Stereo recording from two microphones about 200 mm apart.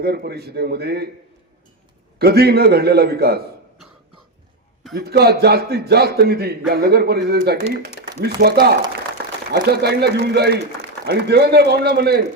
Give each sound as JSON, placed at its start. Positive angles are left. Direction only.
{"t": 0.0, "sound": "a man's voice", "side_deg": -55}
{"t": 2.1, "sound": "a man's voice", "side_deg": -50}
{"t": 4.9, "sound": "a man's voice", "side_deg": -50}